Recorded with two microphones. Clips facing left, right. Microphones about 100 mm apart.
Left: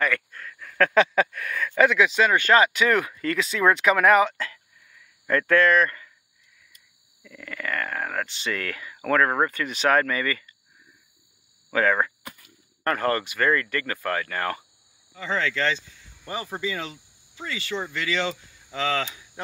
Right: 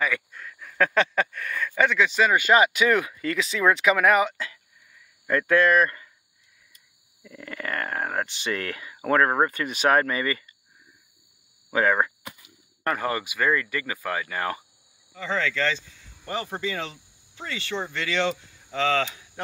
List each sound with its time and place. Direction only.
0.0 s a sound: 10° right (ahead or behind)
0.9 s speech: 5° left (ahead or behind)
7.2 s speech: 30° right (ahead or behind)
11.7 s a sound: 20° right (ahead or behind)
12.8 s speech: 10° right (ahead or behind)
16.4 s speech: centre (ahead or behind)